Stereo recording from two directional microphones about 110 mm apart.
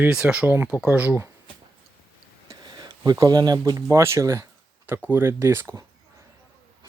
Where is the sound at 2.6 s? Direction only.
40° right (ahead or behind).